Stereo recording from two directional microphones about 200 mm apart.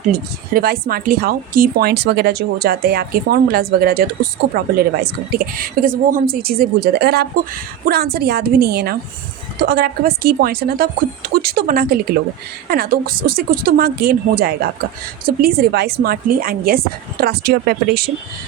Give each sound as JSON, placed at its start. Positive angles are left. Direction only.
{"t": 0.1, "sound": "speech", "side_deg": -50}